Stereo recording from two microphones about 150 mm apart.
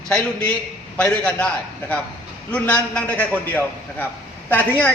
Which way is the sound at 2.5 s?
10° left (ahead or behind).